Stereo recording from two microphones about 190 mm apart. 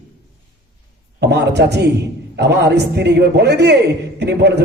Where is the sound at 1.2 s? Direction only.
60° right (ahead or behind).